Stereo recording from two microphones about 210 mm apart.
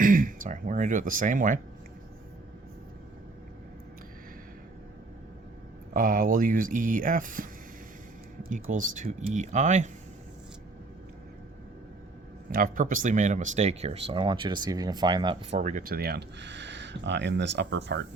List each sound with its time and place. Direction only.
0.0 s speech: 40° right (ahead or behind)
5.9 s speech: 40° right (ahead or behind)
9.0 s speech: 35° right (ahead or behind)
12.5 s speech: 40° right (ahead or behind)